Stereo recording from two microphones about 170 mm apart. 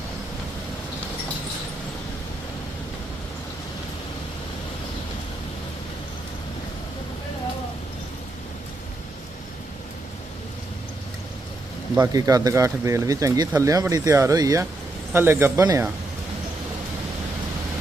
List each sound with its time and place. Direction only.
11.9 s speech: 20° right (ahead or behind)